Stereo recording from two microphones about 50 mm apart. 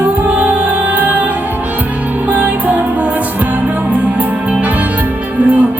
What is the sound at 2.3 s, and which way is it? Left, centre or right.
Music, right.